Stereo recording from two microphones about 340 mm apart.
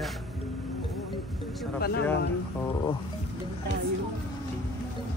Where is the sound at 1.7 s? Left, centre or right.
Left.